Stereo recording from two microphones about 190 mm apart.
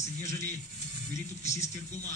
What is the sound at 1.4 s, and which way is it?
Speech, 35° left (ahead or behind).